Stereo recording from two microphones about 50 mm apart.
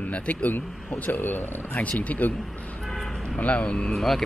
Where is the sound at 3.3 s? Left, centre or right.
Left.